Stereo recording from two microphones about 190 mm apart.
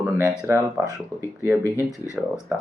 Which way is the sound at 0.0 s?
10° right (ahead or behind).